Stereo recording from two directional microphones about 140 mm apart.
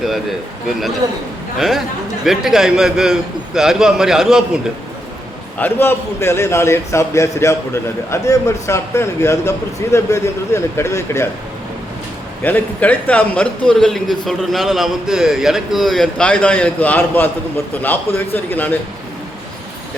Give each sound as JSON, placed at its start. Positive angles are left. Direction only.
{"t": 0.0, "sound": "a man's voice", "side_deg": 0}
{"t": 1.5, "sound": "a man's voice", "side_deg": 0}
{"t": 5.5, "sound": "a man's voice", "side_deg": 15}
{"t": 12.4, "sound": "a man's voice", "side_deg": 10}